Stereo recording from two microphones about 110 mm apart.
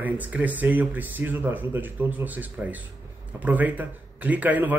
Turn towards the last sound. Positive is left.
turn(degrees=-15)  # may be behind; listen again after turning